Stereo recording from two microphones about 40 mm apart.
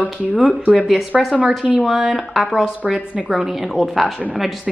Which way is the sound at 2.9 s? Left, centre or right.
Right.